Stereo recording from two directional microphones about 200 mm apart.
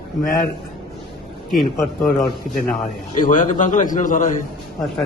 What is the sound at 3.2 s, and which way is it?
A man's voice, 40° left (ahead or behind).